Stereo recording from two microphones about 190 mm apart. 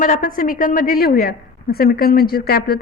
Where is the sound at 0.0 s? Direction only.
45° left (ahead or behind).